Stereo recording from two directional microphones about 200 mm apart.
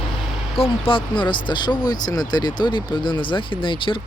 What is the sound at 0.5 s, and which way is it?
Speech, 25° left (ahead or behind).